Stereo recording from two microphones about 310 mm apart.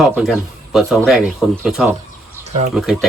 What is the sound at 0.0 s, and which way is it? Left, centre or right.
Speech, centre.